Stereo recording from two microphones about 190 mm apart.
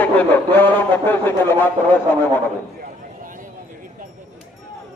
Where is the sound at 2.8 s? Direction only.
45° right (ahead or behind).